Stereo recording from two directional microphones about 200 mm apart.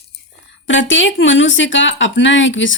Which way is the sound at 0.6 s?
65° left (ahead or behind).